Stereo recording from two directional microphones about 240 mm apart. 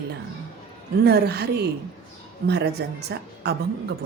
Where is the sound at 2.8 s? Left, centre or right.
Right.